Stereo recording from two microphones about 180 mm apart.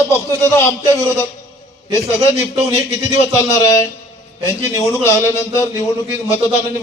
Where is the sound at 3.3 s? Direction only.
15° left (ahead or behind).